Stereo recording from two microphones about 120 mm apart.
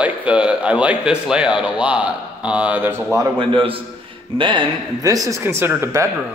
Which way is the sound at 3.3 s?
45° right (ahead or behind).